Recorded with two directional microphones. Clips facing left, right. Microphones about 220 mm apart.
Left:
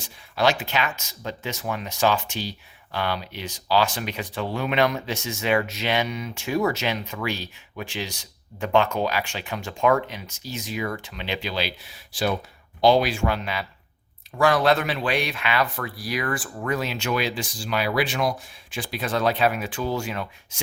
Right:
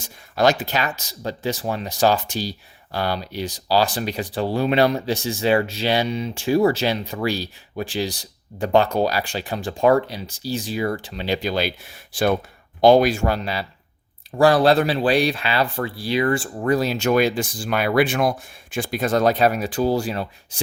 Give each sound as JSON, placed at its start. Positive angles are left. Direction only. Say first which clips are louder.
{"t": 0.0, "sound": "speech", "louder": "right 4 dB", "side_deg": -40}